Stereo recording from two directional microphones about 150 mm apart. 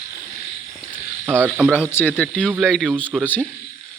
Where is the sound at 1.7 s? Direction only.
15° left (ahead or behind).